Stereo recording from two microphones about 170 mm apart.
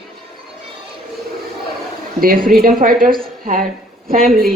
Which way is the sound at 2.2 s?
55° right (ahead or behind).